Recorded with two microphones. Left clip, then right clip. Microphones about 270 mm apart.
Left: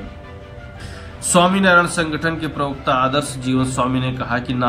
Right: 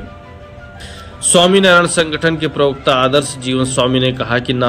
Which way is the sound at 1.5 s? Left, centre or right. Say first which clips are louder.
Right 4 dB; centre.